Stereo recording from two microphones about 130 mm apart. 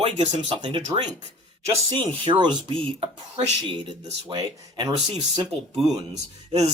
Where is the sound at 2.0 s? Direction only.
35° right (ahead or behind).